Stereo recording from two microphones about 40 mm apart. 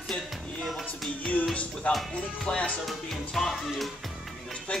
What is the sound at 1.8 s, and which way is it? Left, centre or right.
Speech, left.